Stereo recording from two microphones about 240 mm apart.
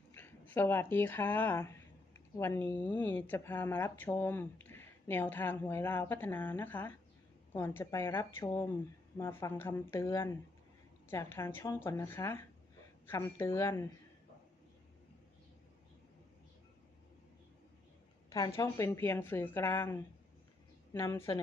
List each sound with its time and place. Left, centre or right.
0.1 s speech: centre
18.3 s speech: centre